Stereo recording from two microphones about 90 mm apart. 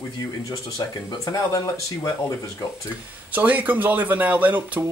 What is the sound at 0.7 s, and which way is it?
Speech, 45° left (ahead or behind).